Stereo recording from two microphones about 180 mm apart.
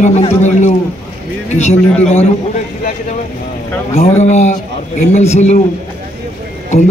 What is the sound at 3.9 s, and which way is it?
A man's voice, 35° left (ahead or behind).